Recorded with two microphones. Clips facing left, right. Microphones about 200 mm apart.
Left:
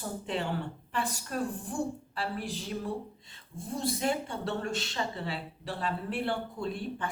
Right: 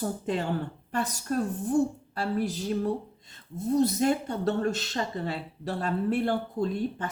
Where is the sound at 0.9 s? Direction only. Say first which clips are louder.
Right 5 dB; 40° right (ahead or behind).